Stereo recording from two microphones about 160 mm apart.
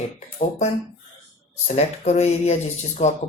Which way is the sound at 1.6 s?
45° left (ahead or behind).